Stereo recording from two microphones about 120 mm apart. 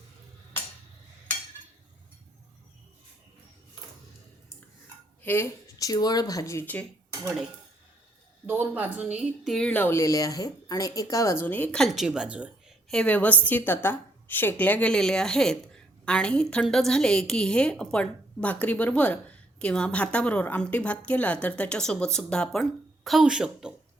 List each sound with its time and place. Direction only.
5.2 s speech: 20° left (ahead or behind)
8.4 s a woman's voice: 15° right (ahead or behind)
9.6 s a woman's voice: 10° left (ahead or behind)
10.0 s speech: 25° left (ahead or behind)
11.8 s a woman's voice: centre (ahead or behind)
12.9 s a woman's voice: 10° left (ahead or behind)